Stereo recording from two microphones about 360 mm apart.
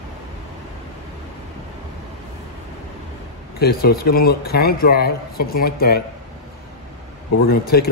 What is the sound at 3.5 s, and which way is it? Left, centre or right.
Speech, left.